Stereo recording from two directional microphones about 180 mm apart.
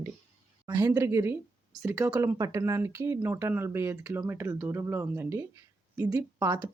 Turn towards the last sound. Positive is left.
turn(degrees=-25)  # may be behind; listen again after turning